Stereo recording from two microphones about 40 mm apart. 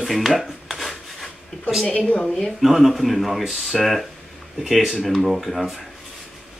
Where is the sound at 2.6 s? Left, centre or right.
Centre.